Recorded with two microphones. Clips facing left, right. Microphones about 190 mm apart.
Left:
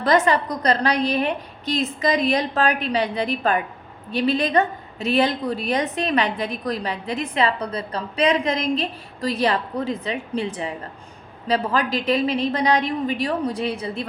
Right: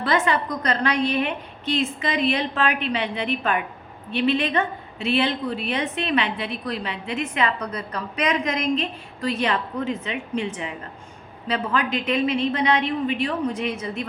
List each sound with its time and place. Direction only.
0.0 s a woman's voice: 40° left (ahead or behind)